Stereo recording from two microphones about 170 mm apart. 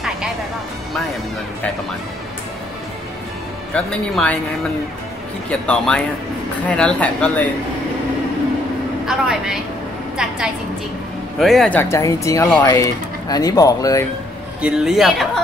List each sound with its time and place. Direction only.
3.7 s speech: 5° left (ahead or behind)
5.5 s speech: 5° left (ahead or behind)
9.0 s a woman's voice: 5° right (ahead or behind)
11.3 s speech: centre (ahead or behind); by 14.0 s 20° left (ahead or behind)
14.6 s speech: centre (ahead or behind)